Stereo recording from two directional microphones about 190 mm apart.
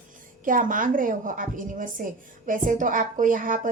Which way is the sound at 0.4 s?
45° right (ahead or behind).